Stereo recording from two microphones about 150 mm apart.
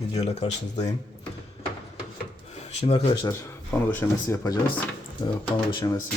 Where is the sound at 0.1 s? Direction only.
45° left (ahead or behind).